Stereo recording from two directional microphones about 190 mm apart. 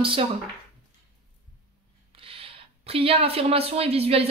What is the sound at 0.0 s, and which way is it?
Speech, 30° right (ahead or behind).